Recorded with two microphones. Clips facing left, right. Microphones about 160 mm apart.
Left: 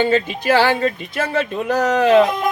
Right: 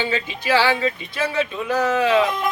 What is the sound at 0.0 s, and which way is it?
Speech, 50° left (ahead or behind).